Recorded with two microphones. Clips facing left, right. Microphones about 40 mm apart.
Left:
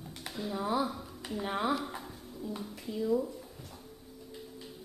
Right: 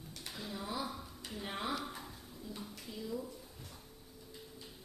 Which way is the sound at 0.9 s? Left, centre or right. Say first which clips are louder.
Left 6 dB; centre.